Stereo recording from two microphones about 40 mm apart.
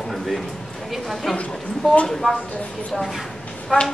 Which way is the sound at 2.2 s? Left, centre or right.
Centre.